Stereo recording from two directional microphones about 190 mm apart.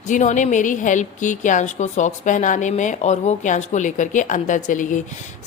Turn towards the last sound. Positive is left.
turn(degrees=45)  # may be behind; listen again after turning